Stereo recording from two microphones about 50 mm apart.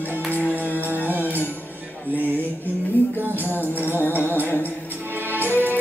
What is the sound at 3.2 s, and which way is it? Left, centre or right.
Music, right.